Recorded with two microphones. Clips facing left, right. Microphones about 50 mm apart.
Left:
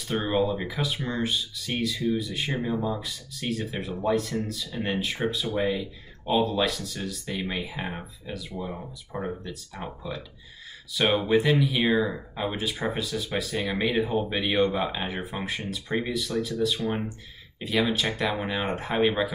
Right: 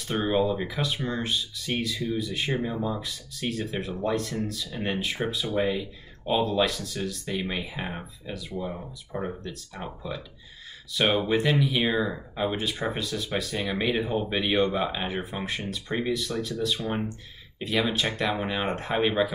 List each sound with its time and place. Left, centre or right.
0.0 s speech: centre